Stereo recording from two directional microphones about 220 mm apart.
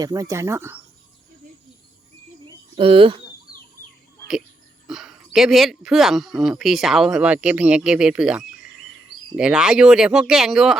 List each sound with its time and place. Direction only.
0.0 s speech: 15° right (ahead or behind)
2.7 s speech: 25° right (ahead or behind)
4.9 s speech: centre (ahead or behind)